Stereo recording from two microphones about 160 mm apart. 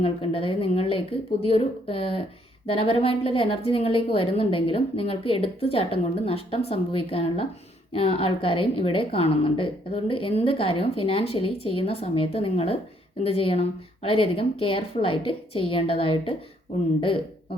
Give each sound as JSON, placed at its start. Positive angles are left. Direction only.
{"t": 0.0, "sound": "a woman's voice", "side_deg": 35}